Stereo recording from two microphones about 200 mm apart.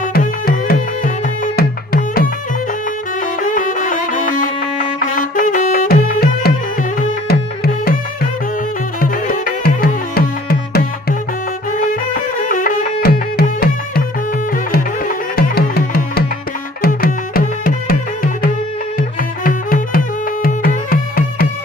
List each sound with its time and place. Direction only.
0.0 s music: 45° left (ahead or behind)
3.4 s music: 40° left (ahead or behind)
9.0 s music: 45° left (ahead or behind)